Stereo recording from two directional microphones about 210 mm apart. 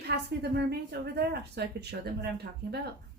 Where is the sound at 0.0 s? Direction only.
50° right (ahead or behind).